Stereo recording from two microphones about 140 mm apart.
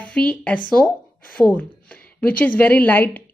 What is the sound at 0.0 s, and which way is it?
Speech, 10° left (ahead or behind).